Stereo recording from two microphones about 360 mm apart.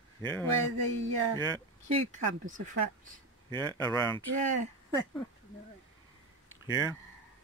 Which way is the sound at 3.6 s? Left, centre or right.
Centre.